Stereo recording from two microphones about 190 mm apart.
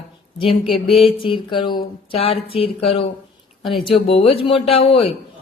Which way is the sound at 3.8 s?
30° left (ahead or behind).